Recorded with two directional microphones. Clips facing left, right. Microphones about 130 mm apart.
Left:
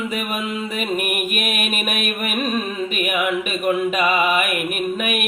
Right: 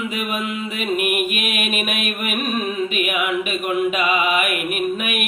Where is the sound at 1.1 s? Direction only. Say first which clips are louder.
Right 1 dB; 45° left (ahead or behind).